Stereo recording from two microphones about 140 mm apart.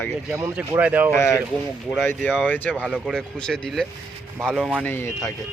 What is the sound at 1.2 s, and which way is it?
Speech, 20° left (ahead or behind).